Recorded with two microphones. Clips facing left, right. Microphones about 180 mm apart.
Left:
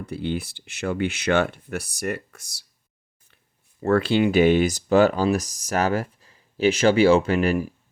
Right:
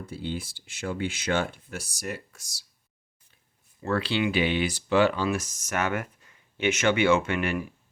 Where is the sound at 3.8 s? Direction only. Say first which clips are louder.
Left 7 dB; 50° left (ahead or behind).